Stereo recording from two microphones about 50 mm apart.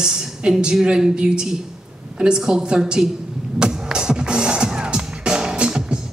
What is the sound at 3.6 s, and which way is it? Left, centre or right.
Music, centre.